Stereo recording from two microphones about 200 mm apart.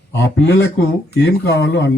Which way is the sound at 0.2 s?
60° left (ahead or behind).